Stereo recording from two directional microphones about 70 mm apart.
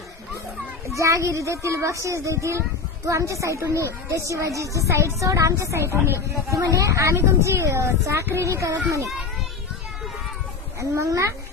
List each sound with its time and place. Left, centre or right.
0.9 s speech: right
6.5 s speech: right
10.8 s speech: right